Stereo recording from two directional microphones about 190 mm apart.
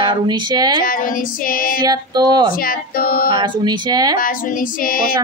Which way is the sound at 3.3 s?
20° right (ahead or behind).